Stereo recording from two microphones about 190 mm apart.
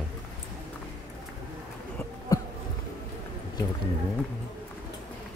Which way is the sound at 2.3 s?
20° left (ahead or behind).